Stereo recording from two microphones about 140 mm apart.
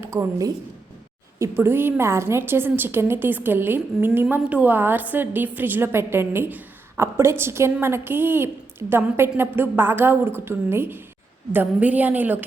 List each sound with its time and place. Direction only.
0.0 s a woman's voice: 20° right (ahead or behind)